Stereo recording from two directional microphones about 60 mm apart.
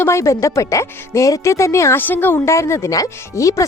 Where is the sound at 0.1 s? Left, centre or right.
Left.